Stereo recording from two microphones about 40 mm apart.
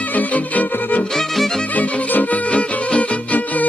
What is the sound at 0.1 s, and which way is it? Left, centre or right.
Music, left.